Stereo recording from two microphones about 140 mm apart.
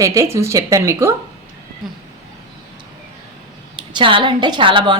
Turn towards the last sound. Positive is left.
turn(degrees=-35)  # may be behind; listen again after turning